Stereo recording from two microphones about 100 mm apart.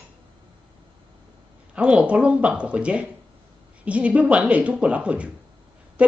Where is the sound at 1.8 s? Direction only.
10° right (ahead or behind).